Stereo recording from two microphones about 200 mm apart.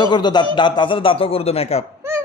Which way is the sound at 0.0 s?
20° left (ahead or behind).